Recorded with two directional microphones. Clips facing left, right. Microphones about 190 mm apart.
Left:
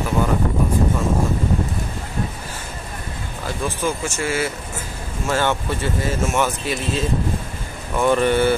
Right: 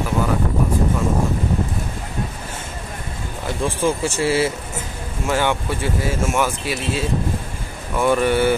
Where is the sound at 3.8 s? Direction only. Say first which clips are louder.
Right 5 dB; 30° right (ahead or behind).